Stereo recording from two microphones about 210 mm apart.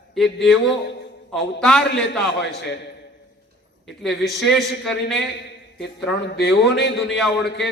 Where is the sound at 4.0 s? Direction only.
Centre (ahead or behind).